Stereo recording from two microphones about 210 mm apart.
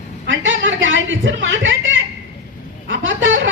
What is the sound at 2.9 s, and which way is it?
Vehicle, 65° right (ahead or behind).